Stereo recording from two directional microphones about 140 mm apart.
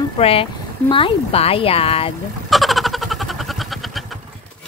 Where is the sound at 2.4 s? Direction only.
Centre (ahead or behind).